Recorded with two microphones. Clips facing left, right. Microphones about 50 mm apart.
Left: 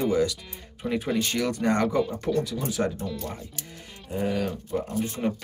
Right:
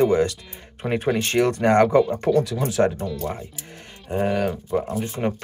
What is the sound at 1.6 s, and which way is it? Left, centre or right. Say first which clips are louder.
Speech: right 7 dB; right.